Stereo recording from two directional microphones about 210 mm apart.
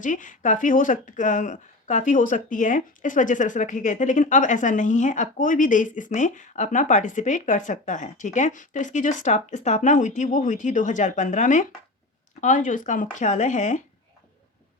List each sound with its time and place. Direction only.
0.0 s speech: 40° left (ahead or behind)